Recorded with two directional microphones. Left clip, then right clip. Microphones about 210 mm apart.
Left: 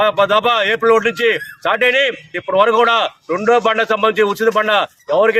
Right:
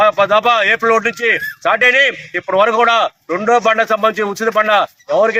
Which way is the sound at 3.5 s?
25° left (ahead or behind).